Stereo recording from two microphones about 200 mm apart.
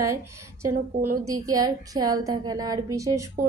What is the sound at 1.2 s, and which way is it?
A woman's voice, 15° right (ahead or behind).